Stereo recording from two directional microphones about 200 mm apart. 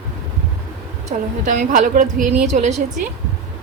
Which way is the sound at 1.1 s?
40° right (ahead or behind).